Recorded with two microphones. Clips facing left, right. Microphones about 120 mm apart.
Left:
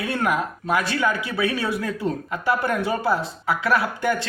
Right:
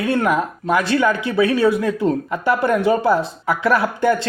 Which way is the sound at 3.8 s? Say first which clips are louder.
Right 5 dB; 30° right (ahead or behind).